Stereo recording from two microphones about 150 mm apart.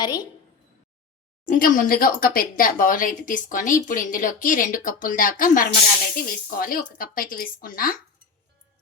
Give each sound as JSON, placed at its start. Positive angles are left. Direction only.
{"t": 0.0, "sound": "a woman's voice", "side_deg": 25}
{"t": 1.5, "sound": "speech", "side_deg": 65}